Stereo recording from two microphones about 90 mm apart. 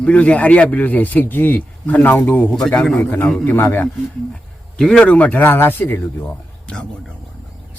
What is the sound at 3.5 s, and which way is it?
Speech, 20° left (ahead or behind).